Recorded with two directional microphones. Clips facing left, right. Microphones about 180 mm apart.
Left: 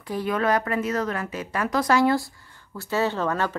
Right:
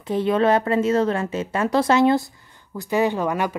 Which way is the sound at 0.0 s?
25° right (ahead or behind).